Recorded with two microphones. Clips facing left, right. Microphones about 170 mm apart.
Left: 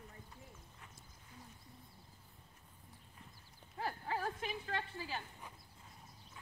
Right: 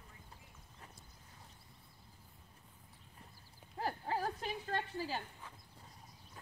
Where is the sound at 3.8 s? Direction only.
40° right (ahead or behind).